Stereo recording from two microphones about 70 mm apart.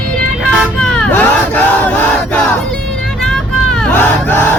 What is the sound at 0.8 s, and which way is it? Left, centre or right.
Vehicle, centre.